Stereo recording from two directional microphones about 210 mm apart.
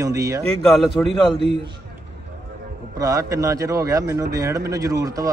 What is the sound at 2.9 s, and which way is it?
Speech, 15° right (ahead or behind).